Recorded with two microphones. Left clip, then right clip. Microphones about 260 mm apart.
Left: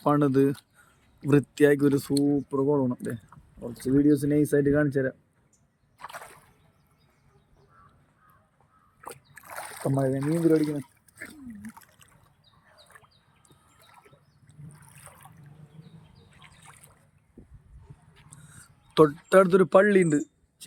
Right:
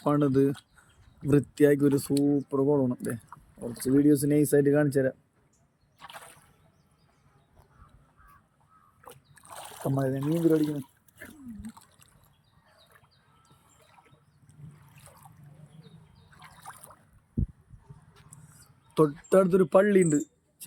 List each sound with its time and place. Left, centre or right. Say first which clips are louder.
0.0 s speech: left 2 dB; centre
3.6 s speech: even; centre
4.1 s speech: even; centre
6.0 s a sound: left 4 dB; centre
9.6 s boat: left 3 dB; centre
12.9 s chicken: left 7 dB; left
13.7 s a sound: left 4 dB; left
14.8 s water: left 4 dB; centre
16.6 s boat: right 6 dB; right
18.9 s a man's voice: left 4 dB; centre